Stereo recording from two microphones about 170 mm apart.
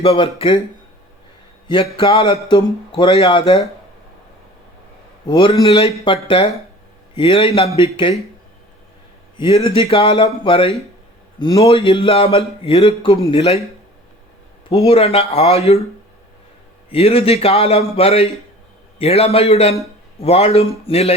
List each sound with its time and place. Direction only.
0.0 s speech: 35° left (ahead or behind)
1.6 s a man's voice: 30° left (ahead or behind)
5.6 s speech: 30° left (ahead or behind)
7.2 s speech: 30° left (ahead or behind)
9.4 s a man's voice: 35° left (ahead or behind)
14.7 s speech: 35° left (ahead or behind)
16.9 s speech: 35° left (ahead or behind)